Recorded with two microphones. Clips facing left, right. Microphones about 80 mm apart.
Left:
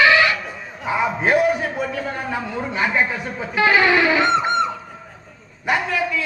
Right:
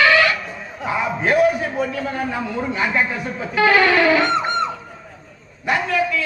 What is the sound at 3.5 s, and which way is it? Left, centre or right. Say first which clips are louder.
Music: right 1 dB; centre.